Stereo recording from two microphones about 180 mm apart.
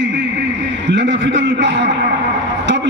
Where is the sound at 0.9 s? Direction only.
80° right.